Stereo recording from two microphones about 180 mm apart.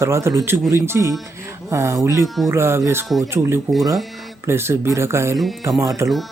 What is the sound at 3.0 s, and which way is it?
Speech, centre (ahead or behind).